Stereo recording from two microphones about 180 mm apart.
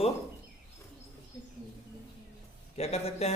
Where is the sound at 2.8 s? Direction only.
35° left (ahead or behind).